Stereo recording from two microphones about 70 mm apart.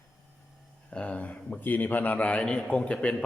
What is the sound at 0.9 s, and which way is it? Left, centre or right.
A man's voice, centre.